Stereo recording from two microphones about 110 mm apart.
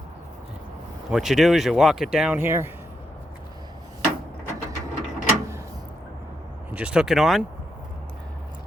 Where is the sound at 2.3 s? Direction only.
20° right (ahead or behind).